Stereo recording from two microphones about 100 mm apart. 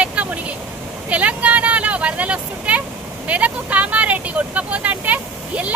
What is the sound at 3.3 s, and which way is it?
A woman's voice, 15° right (ahead or behind).